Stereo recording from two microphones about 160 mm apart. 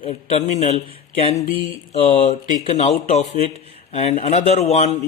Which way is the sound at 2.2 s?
50° left (ahead or behind).